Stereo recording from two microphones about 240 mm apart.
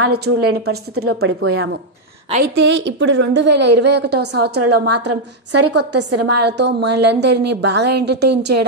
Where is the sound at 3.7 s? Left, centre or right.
Right.